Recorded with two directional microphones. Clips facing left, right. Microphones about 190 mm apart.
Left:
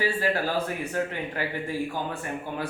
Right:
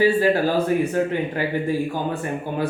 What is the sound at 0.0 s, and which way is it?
Speech, 20° right (ahead or behind).